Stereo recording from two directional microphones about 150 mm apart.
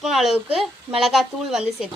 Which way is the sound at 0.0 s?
Centre (ahead or behind).